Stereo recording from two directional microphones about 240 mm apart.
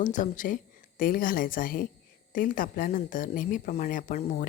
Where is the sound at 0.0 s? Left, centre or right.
Left.